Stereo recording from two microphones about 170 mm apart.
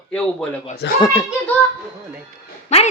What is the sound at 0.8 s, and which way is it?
Speech, 90° left.